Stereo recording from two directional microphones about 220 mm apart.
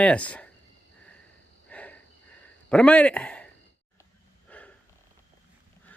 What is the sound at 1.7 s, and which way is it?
Cricket, 5° left (ahead or behind).